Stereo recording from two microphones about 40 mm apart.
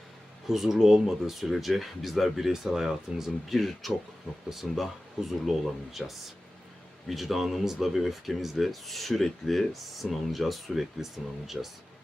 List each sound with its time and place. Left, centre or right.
0.4 s speech: centre
3.5 s speech: centre
4.4 s speech: centre